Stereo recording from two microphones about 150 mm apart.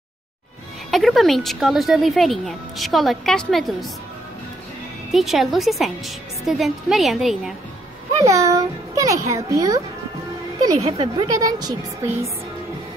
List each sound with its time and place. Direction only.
0.9 s speech: centre (ahead or behind)
5.1 s speech: centre (ahead or behind)
8.2 s a child's voice: 20° right (ahead or behind)
10.8 s a child's voice: 35° right (ahead or behind)